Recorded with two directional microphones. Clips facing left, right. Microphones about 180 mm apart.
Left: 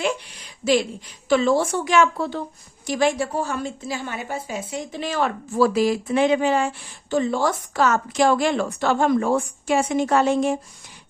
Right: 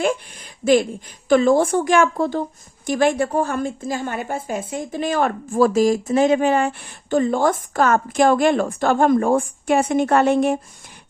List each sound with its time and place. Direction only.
0.0 s a woman's voice: 50° right (ahead or behind)